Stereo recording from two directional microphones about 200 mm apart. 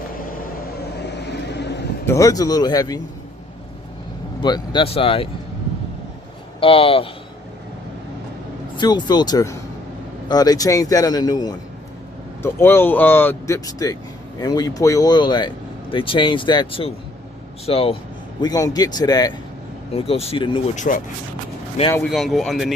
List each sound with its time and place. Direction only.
1.0 s vehicle: 55° left (ahead or behind)
2.0 s speech: 15° left (ahead or behind)
4.4 s speech: 25° left (ahead or behind)
6.6 s speech: 25° left (ahead or behind)
8.7 s speech: 20° left (ahead or behind)
18.3 s speech: 20° left (ahead or behind)
19.9 s speech: 30° left (ahead or behind)
20.9 s speech: 40° left (ahead or behind)
22.1 s speech: centre (ahead or behind)